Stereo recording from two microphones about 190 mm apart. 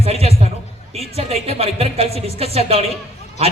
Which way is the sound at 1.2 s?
30° right (ahead or behind).